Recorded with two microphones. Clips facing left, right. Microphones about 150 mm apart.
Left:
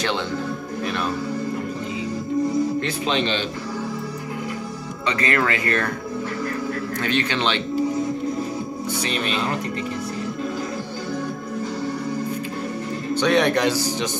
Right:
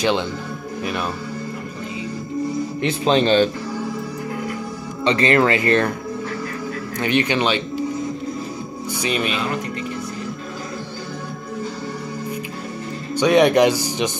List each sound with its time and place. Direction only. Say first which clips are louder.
3.1 s a man's voice: right 9 dB; 40° right (ahead or behind)
5.0 s speech: right 6 dB; 25° right (ahead or behind)
7.0 s speech: right 5 dB; 15° right (ahead or behind)
9.0 s speech: right 5 dB; 10° right (ahead or behind)
13.1 s speech: right 4 dB; 10° right (ahead or behind)